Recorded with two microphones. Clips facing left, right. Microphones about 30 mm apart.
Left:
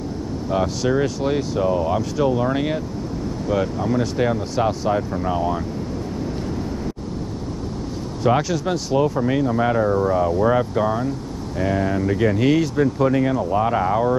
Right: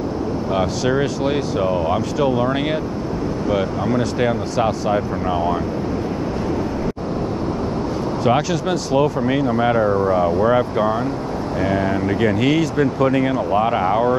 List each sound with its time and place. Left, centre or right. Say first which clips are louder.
0.6 s speech: even; right
3.4 s speech: right 1 dB; right
8.9 s speech: right 1 dB; right